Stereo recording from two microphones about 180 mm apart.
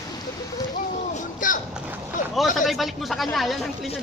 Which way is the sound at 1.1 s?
45° left (ahead or behind).